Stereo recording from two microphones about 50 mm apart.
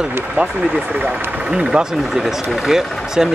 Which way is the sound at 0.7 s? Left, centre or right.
Right.